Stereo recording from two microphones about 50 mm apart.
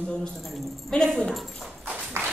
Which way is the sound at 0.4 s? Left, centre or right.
Centre.